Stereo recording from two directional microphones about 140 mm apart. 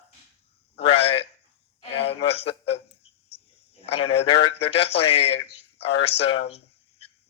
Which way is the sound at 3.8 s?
45° left (ahead or behind).